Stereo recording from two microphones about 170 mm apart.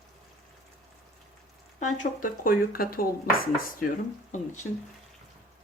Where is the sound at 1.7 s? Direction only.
50° left (ahead or behind).